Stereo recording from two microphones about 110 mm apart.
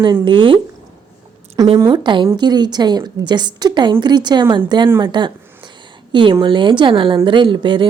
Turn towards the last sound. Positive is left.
turn(degrees=-45)  # may be behind; listen again after turning